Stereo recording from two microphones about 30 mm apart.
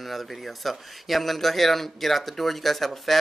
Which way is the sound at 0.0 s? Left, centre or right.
Centre.